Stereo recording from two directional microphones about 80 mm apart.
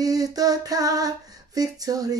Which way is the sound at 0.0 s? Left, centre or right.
Right.